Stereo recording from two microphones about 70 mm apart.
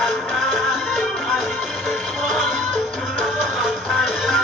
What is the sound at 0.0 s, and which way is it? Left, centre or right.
Music, centre.